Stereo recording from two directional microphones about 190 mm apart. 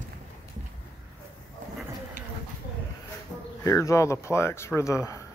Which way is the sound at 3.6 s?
15° left (ahead or behind).